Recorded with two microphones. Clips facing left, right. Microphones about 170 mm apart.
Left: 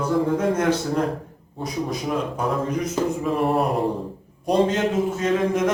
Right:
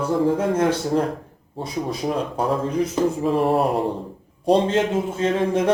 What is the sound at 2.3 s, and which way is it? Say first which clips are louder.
A man's voice: right 2 dB; 30° right (ahead or behind).